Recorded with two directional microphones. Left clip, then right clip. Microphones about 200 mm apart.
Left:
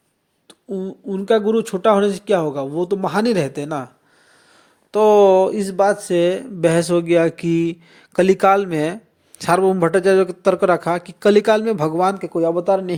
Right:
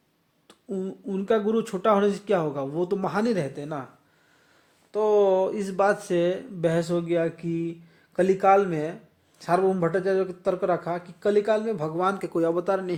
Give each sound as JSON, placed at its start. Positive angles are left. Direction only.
{"t": 1.1, "sound": "speech", "side_deg": 20}
{"t": 4.9, "sound": "speech", "side_deg": 40}
{"t": 6.1, "sound": "speech", "side_deg": 30}
{"t": 12.0, "sound": "speech", "side_deg": 15}